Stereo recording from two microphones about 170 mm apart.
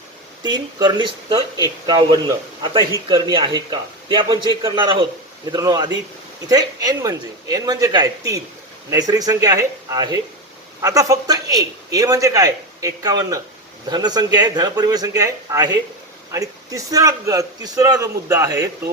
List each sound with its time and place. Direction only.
0.4 s a man's voice: 25° right (ahead or behind)